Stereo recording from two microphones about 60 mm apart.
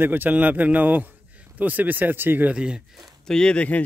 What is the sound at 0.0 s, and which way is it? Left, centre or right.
Speech, right.